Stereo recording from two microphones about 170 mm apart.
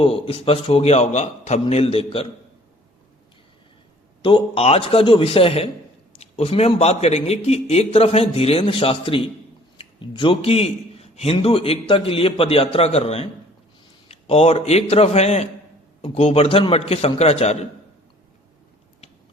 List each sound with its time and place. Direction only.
0.0 s a man's voice: 35° left (ahead or behind)
4.2 s a man's voice: 30° left (ahead or behind)